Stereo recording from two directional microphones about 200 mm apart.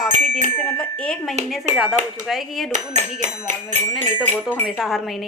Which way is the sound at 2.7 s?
35° right (ahead or behind).